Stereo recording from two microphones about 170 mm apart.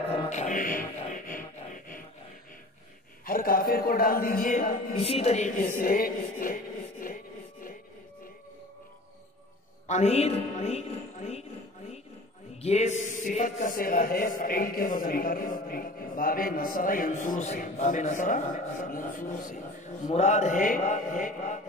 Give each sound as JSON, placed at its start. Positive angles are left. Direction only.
{"t": 0.3, "sound": "music", "side_deg": 45}
{"t": 3.3, "sound": "a man's voice", "side_deg": 55}
{"t": 4.9, "sound": "speech", "side_deg": 35}
{"t": 5.8, "sound": "music", "side_deg": 55}
{"t": 9.8, "sound": "a woman's voice", "side_deg": 40}
{"t": 12.6, "sound": "speech", "side_deg": 40}